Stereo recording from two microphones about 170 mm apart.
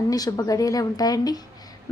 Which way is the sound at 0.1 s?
20° left (ahead or behind).